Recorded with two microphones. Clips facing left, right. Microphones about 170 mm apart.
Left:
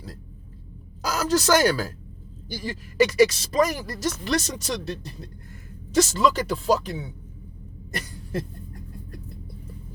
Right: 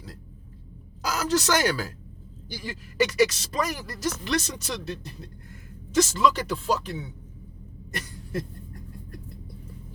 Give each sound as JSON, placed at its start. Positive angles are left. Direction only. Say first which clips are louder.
{"t": 1.0, "sound": "a woman's voice", "louder": "left 2 dB", "side_deg": 40}